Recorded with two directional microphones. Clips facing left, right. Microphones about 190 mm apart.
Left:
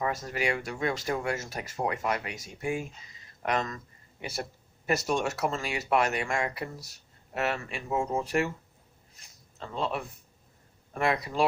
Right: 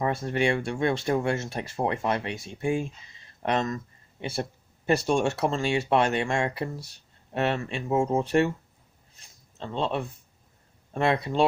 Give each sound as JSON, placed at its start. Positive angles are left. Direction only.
{"t": 0.0, "sound": "speech", "side_deg": -30}